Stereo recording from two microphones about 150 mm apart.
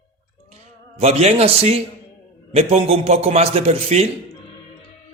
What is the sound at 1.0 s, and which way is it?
Speech, 45° right (ahead or behind).